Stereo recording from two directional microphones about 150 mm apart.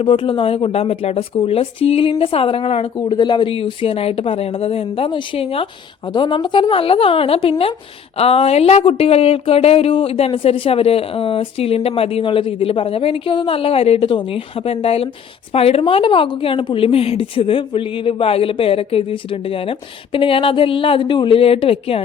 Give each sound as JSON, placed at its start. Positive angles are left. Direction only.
{"t": 0.0, "sound": "speech", "side_deg": 35}